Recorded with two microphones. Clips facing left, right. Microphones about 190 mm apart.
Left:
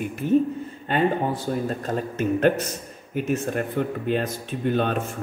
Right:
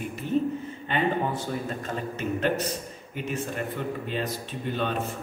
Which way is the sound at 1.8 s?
45° left (ahead or behind).